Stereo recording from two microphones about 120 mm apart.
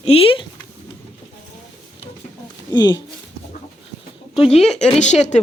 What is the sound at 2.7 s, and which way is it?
Speech, 35° left (ahead or behind).